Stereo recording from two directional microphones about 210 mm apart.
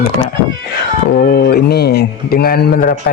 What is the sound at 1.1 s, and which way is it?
A man's voice, 50° left (ahead or behind).